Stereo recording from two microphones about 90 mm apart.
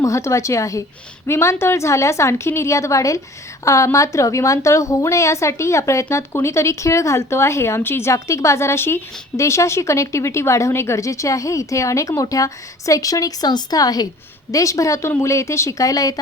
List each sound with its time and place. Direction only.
0.0 s a woman's voice: 35° left (ahead or behind)